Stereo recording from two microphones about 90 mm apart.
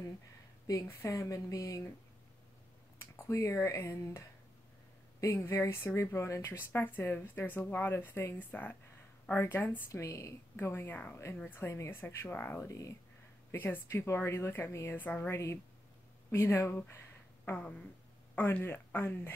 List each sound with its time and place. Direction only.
0.7 s speech: 35° left (ahead or behind)
3.0 s speech: 30° left (ahead or behind)
9.8 s speech: 35° left (ahead or behind)
11.3 s a sound: 15° left (ahead or behind)
11.6 s speech: 30° left (ahead or behind)
12.6 s speech: 35° left (ahead or behind)
17.5 s a sound: 15° left (ahead or behind)
18.3 s speech: 25° left (ahead or behind)